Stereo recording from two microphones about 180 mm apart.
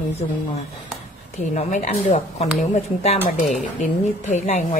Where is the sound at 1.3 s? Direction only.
40° left (ahead or behind).